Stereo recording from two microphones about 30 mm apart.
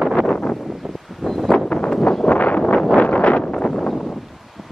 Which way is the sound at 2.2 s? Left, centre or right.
Left.